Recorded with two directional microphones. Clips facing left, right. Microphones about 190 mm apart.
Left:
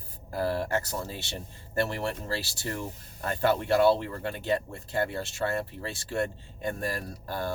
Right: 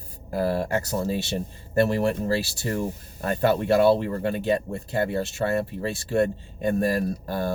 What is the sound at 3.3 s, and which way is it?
Speech, 15° right (ahead or behind).